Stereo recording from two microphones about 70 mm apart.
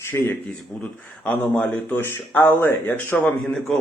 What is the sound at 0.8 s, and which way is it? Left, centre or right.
Speech, left.